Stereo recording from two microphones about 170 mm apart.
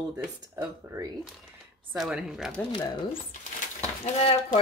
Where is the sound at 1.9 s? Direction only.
Centre (ahead or behind).